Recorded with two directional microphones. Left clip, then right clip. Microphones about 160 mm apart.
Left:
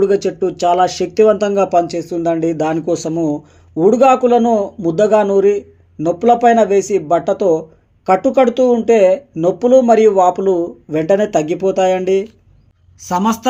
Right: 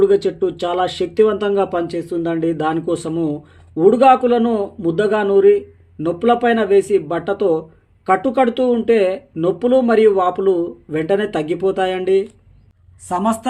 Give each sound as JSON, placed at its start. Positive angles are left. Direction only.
{"t": 0.0, "sound": "speech", "side_deg": 25}